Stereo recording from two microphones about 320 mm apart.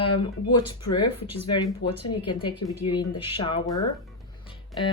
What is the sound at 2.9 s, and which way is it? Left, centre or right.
Speech, centre.